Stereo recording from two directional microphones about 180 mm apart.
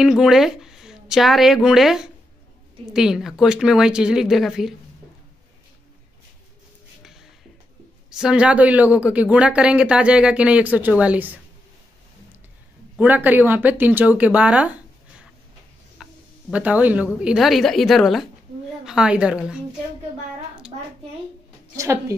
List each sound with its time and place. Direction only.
0.0 s a woman's voice: 5° right (ahead or behind)
7.0 s music: centre (ahead or behind)
8.1 s speech: 5° right (ahead or behind)
12.9 s speech: 10° right (ahead or behind)
16.0 s speech: 5° right (ahead or behind)
21.7 s speech: 15° right (ahead or behind)